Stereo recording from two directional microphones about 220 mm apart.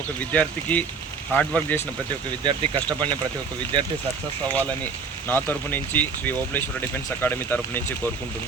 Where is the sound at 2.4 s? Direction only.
20° right (ahead or behind).